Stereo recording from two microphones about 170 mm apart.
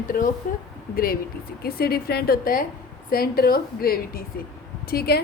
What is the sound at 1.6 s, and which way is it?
A woman's voice, 65° left (ahead or behind).